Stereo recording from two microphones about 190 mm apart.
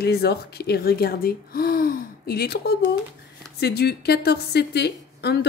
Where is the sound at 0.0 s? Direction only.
60° left (ahead or behind).